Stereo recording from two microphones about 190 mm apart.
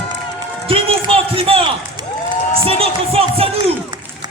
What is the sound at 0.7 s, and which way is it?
Speech, 30° right (ahead or behind).